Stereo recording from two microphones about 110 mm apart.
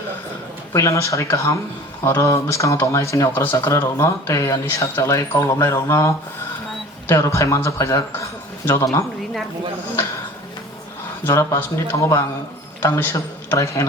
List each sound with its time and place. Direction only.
0.7 s speech: 25° left (ahead or behind)
11.2 s a man's voice: 25° left (ahead or behind)